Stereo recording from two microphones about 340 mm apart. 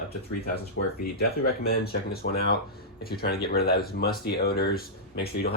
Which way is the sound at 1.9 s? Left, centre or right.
Left.